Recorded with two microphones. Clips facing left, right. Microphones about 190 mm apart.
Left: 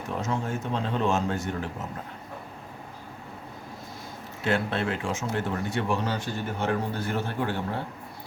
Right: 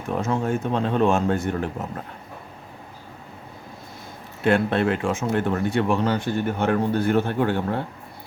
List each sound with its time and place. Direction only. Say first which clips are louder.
0.2 s speech: right 7 dB; 55° right (ahead or behind)
4.4 s speech: right 7 dB; 55° right (ahead or behind)